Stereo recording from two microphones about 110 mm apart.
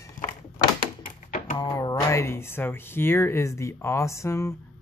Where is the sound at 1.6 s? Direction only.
35° left (ahead or behind).